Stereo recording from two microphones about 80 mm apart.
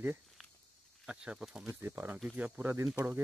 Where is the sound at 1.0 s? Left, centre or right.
Centre.